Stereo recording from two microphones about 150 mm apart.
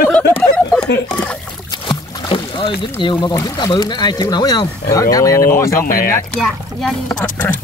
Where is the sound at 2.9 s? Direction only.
30° left (ahead or behind).